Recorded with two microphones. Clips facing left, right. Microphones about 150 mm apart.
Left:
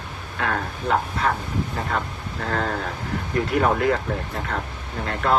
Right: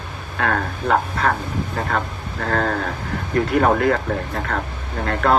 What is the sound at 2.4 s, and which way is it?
Speech, 45° right (ahead or behind).